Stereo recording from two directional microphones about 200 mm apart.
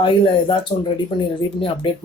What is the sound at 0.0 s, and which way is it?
Speech, 25° left (ahead or behind).